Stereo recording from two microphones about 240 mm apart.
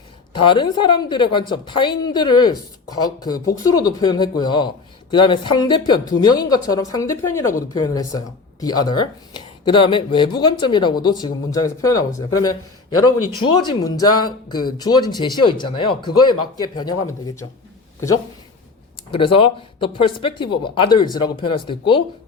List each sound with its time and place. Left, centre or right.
0.4 s a woman's voice: centre
19.1 s speech: left